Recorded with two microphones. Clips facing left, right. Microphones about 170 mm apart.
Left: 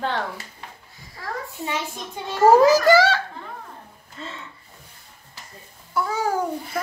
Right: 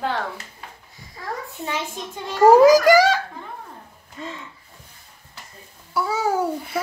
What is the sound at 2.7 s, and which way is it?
A child's voice, 15° right (ahead or behind).